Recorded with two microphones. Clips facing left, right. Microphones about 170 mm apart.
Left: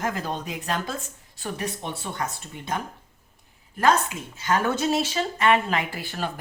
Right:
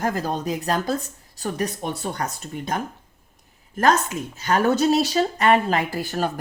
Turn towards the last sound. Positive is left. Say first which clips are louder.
# right 6 dB
turn(degrees=-40)  # may be behind; listen again after turning